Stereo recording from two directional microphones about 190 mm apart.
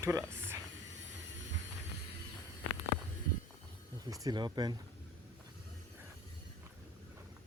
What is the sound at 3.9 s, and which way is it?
Speech, 20° right (ahead or behind).